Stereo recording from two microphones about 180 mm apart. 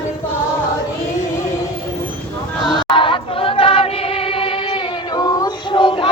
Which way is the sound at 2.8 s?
25° left (ahead or behind).